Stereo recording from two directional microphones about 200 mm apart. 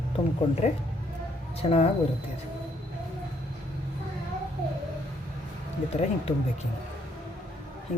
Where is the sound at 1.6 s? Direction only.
25° left (ahead or behind).